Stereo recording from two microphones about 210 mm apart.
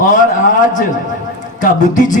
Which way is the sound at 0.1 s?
35° left (ahead or behind).